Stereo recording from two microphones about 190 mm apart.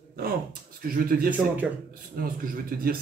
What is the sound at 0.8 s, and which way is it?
Speech, 50° right (ahead or behind).